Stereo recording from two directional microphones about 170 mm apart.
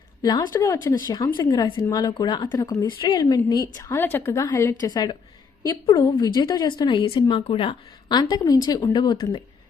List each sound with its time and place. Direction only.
0.2 s a woman's voice: 25° left (ahead or behind)